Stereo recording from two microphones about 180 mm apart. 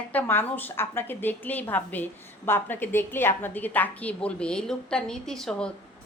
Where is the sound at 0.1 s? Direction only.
10° left (ahead or behind).